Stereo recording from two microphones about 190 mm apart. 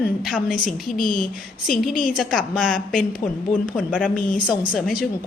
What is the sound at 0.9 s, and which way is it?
Speech, 45° left (ahead or behind).